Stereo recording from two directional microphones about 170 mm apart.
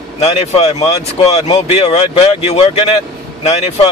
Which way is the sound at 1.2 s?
40° left (ahead or behind).